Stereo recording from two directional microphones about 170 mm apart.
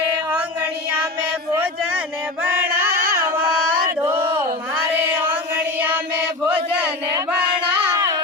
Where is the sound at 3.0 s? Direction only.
60° right (ahead or behind).